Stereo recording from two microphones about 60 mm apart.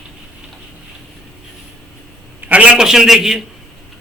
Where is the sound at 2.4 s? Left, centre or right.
Right.